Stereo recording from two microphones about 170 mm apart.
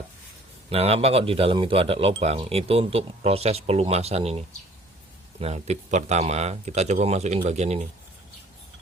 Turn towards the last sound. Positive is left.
turn(degrees=-40)  # may be behind; listen again after turning